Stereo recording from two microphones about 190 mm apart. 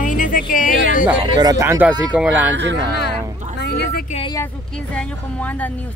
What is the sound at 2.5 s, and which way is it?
Speech, 70° right (ahead or behind).